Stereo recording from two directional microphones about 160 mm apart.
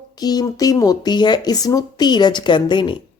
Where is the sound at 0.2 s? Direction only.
25° left (ahead or behind).